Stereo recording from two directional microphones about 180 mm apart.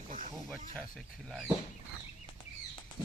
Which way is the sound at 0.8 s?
Centre (ahead or behind).